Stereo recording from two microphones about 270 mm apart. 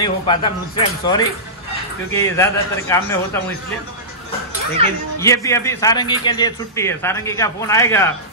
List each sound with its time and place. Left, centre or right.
0.0 s a man's voice: centre
5.2 s a man's voice: centre